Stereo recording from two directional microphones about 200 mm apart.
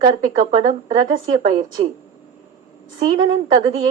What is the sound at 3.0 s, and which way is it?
Speech, 25° right (ahead or behind).